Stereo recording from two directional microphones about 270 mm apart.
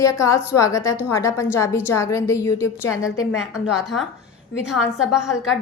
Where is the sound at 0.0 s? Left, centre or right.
Centre.